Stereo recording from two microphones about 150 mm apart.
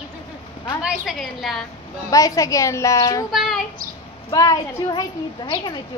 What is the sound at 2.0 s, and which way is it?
A woman's voice, 20° left (ahead or behind).